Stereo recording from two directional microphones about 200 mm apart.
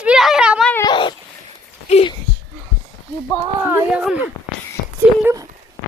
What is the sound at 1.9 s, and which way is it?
Speech, 30° left (ahead or behind).